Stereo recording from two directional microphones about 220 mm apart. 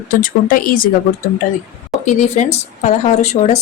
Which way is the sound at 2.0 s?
30° left (ahead or behind).